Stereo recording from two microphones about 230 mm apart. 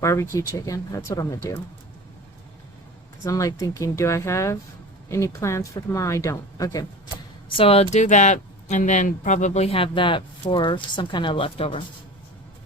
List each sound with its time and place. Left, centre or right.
0.0 s a woman's voice: centre
3.2 s a woman's voice: centre
7.5 s speech: left